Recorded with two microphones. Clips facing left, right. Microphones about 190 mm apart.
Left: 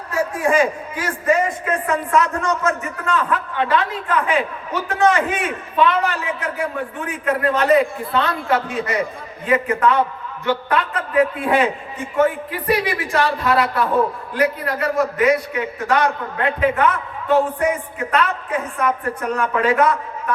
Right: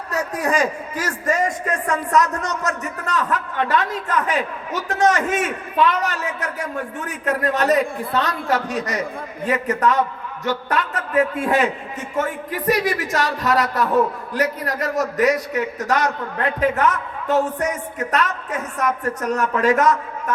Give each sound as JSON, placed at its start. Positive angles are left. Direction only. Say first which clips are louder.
{"t": 0.1, "sound": "a man's voice", "louder": "left 3 dB", "side_deg": -40}